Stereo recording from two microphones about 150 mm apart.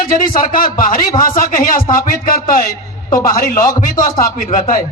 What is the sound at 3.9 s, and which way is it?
Speech, 25° left (ahead or behind).